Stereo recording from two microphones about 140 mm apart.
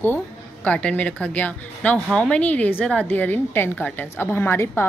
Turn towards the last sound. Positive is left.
turn(degrees=15)  # may be behind; listen again after turning